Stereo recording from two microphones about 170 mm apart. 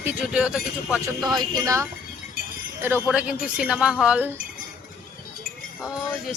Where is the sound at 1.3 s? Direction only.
20° right (ahead or behind).